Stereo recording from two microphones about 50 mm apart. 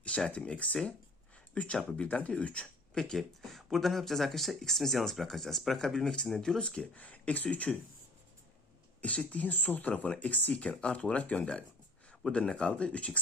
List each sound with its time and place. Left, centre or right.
0.3 s speech: left
2.9 s speech: centre
3.2 s speech: centre
5.9 s speech: centre; by 7.8 s left
9.0 s speech: left